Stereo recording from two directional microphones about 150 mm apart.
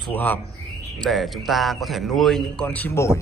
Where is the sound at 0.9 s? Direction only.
Centre (ahead or behind).